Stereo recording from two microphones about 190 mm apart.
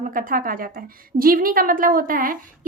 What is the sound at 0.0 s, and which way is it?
A woman's voice, 45° right (ahead or behind).